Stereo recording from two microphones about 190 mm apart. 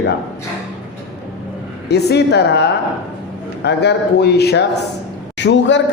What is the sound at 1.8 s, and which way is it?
A man's voice, 60° left (ahead or behind).